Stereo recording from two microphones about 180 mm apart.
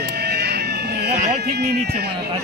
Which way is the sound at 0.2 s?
65° right (ahead or behind).